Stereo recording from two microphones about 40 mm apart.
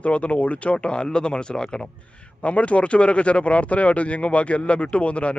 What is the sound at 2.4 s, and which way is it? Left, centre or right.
A man's voice, left.